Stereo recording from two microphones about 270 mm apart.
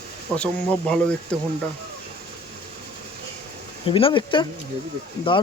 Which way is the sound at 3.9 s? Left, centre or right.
Centre.